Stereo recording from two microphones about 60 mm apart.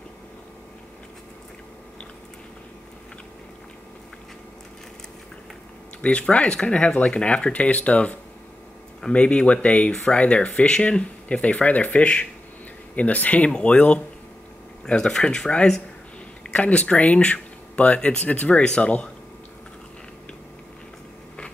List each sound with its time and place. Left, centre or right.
6.0 s speech: left
16.5 s speech: left